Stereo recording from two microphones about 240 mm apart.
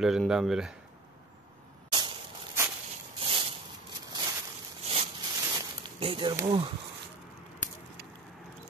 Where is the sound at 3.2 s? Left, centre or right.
Right.